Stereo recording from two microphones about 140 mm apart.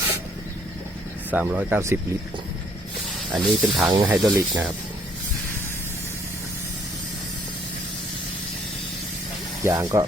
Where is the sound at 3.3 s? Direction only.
Centre (ahead or behind).